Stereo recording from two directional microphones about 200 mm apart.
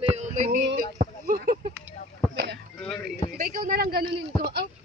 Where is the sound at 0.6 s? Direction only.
45° right (ahead or behind).